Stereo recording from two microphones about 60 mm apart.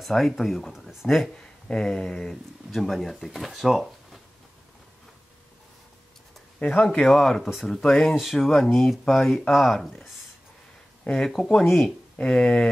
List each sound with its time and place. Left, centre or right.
0.0 s speech: centre
6.6 s speech: left
7.1 s speech: centre